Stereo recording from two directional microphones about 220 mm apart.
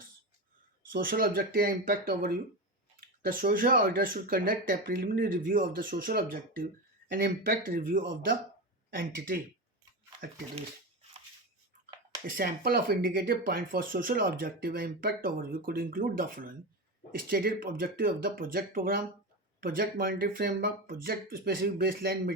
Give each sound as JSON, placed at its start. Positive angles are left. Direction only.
{"t": 0.9, "sound": "speech", "side_deg": -45}
{"t": 12.3, "sound": "speech", "side_deg": -40}